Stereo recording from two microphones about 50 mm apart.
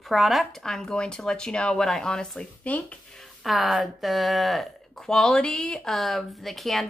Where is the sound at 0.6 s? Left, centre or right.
Centre.